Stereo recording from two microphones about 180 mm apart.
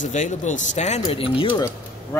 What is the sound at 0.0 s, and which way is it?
Speech, 45° left (ahead or behind).